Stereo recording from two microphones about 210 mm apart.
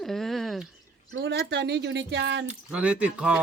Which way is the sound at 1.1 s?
60° right (ahead or behind).